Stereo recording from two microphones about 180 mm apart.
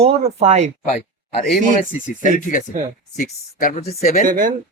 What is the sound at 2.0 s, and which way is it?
Speech, 45° left (ahead or behind).